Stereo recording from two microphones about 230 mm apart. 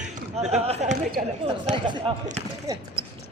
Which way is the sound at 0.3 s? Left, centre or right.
Right.